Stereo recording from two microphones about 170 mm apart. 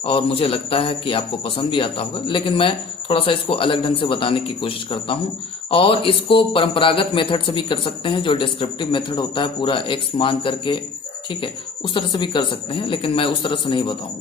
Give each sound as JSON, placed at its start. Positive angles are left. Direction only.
{"t": 0.0, "sound": "a man's voice", "side_deg": 30}
{"t": 11.9, "sound": "a man's voice", "side_deg": 30}